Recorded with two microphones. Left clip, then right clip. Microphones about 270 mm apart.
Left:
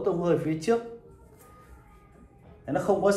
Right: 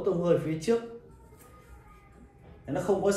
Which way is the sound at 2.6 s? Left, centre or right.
Centre.